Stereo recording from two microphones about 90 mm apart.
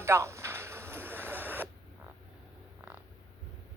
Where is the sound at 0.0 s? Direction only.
30° right (ahead or behind).